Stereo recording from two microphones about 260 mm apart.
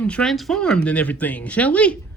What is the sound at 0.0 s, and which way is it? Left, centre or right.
Speech, centre.